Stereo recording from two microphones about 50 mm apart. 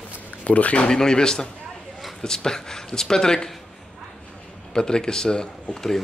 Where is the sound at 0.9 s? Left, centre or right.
Centre.